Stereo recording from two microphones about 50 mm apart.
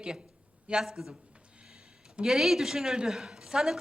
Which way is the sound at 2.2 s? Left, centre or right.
Centre.